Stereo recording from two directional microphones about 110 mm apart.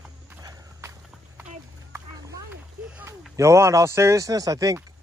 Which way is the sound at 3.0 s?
25° right (ahead or behind).